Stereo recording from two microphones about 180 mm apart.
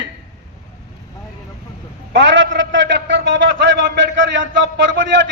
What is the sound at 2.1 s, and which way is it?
A man's voice, 90° right.